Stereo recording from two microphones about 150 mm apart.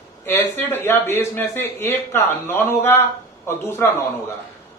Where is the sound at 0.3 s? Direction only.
15° left (ahead or behind).